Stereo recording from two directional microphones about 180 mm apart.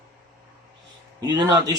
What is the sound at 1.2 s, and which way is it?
Speech, 20° right (ahead or behind).